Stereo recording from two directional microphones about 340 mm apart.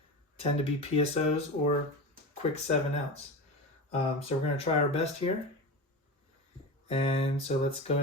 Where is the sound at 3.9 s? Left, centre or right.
Centre.